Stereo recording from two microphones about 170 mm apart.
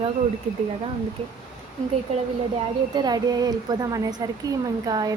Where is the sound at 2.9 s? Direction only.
25° right (ahead or behind).